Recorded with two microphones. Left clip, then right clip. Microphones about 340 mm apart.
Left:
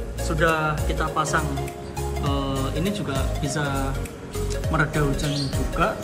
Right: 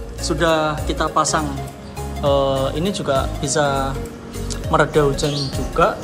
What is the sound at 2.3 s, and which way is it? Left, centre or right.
Music, right.